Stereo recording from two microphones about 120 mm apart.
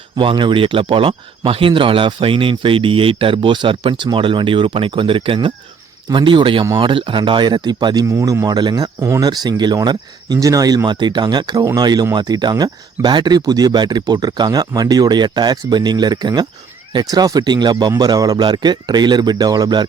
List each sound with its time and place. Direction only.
0.2 s speech: 40° right (ahead or behind)
8.0 s speech: 25° right (ahead or behind)